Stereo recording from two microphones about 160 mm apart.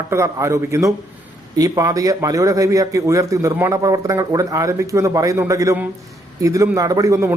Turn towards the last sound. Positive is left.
turn(degrees=-20)  # may be behind; listen again after turning